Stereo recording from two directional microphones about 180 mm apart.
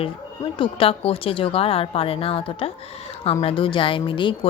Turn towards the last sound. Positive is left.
turn(degrees=25)  # may be behind; listen again after turning